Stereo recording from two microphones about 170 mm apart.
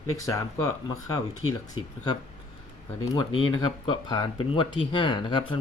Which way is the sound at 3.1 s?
30° left (ahead or behind).